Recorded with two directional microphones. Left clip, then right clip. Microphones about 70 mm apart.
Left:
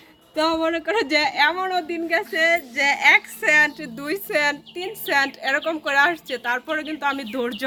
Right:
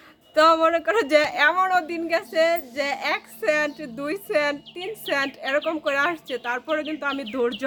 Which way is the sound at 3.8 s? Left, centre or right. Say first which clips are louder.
Left 1 dB; right.